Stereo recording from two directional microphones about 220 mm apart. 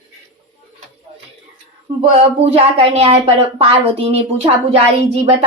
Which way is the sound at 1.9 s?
25° right (ahead or behind).